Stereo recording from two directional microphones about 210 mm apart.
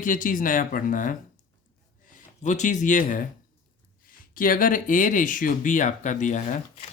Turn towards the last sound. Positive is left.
turn(degrees=35)  # may be behind; listen again after turning